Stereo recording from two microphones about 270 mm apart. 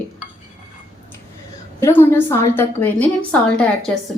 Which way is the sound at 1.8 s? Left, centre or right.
Centre.